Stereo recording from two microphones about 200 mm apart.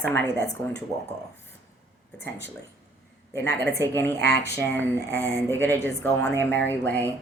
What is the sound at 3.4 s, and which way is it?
Speech, 10° left (ahead or behind).